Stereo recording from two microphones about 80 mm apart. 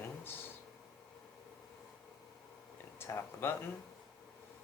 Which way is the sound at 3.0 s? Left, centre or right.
Left.